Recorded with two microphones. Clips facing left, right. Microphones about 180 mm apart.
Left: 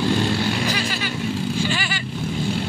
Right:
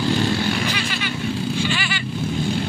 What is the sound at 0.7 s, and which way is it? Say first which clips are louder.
Vehicle: left 1 dB; 40° left (ahead or behind).